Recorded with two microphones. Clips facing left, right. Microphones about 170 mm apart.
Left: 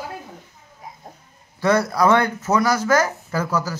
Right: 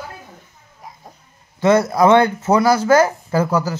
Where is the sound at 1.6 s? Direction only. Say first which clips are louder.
Right 4 dB; 20° right (ahead or behind).